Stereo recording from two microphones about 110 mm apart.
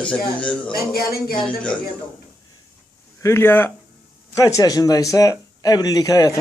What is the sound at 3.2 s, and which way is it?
Speech, 20° left (ahead or behind).